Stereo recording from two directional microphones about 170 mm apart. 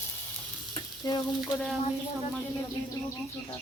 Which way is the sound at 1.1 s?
25° left (ahead or behind).